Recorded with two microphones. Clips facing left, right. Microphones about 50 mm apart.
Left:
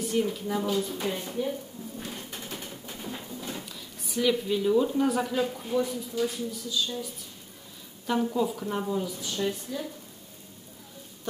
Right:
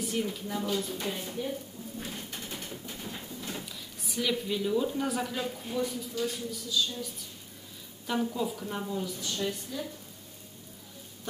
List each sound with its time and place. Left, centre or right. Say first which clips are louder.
0.0 s a woman's voice: left 5 dB; centre
8.4 s a woman's voice: left 5 dB; centre